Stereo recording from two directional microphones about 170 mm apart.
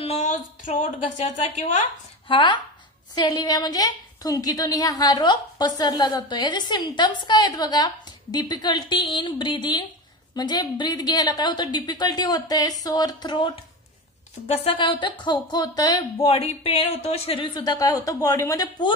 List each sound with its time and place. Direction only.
0.0 s speech: 40° left (ahead or behind)
2.2 s a woman's voice: 30° left (ahead or behind)